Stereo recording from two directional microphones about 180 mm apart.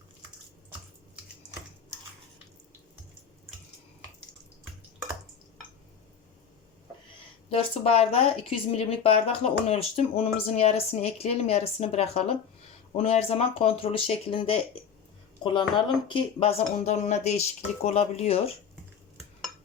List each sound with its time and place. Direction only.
7.5 s speech: 30° left (ahead or behind)